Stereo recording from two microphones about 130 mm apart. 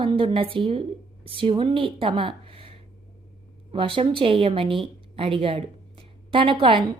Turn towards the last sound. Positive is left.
turn(degrees=-45)  # may be behind; listen again after turning